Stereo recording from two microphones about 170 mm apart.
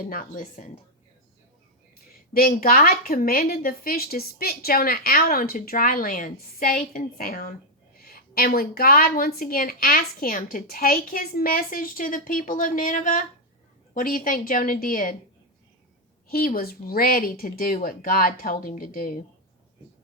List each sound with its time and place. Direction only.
0.0 s speech: 55° left (ahead or behind)
2.3 s a woman's voice: 60° left (ahead or behind)
16.3 s a woman's voice: 60° left (ahead or behind)